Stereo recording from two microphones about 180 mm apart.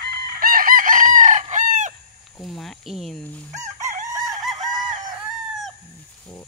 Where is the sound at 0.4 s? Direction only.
50° right (ahead or behind).